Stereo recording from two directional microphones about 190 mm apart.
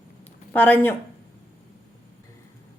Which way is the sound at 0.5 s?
10° left (ahead or behind).